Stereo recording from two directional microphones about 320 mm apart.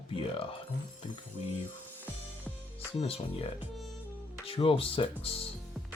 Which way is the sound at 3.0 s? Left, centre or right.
Centre.